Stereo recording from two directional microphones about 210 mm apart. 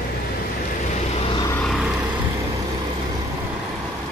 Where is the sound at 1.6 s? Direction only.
Centre (ahead or behind).